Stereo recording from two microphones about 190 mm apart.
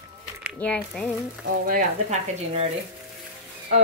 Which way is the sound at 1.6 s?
45° right (ahead or behind).